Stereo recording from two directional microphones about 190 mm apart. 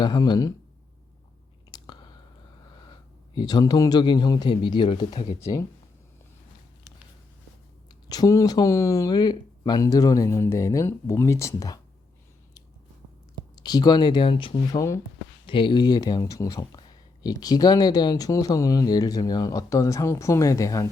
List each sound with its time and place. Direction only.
0.0 s speech: 25° left (ahead or behind)
1.7 s chewing: 25° left (ahead or behind)
3.3 s speech: 20° left (ahead or behind)
8.1 s speech: 20° left (ahead or behind)
13.6 s speech: 20° left (ahead or behind)
15.4 s speech: 25° left (ahead or behind)